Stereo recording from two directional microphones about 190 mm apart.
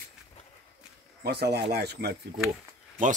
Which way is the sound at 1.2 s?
60° right (ahead or behind).